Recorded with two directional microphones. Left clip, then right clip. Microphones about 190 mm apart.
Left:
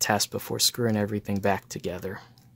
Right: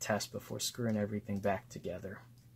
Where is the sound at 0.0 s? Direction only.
50° left (ahead or behind).